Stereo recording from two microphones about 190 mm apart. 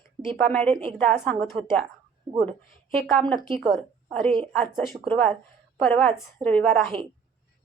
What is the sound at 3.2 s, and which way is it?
A woman's voice, 5° left (ahead or behind).